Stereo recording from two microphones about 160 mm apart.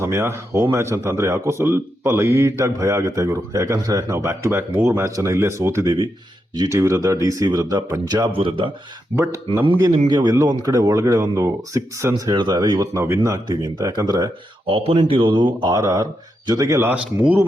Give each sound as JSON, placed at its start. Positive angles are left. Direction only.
{"t": 0.0, "sound": "speech", "side_deg": -15}
{"t": 9.1, "sound": "speech", "side_deg": -15}
{"t": 14.7, "sound": "speech", "side_deg": -35}